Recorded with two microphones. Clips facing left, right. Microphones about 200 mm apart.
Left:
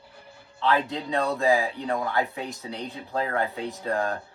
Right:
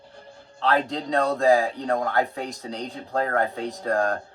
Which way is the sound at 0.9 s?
40° right (ahead or behind).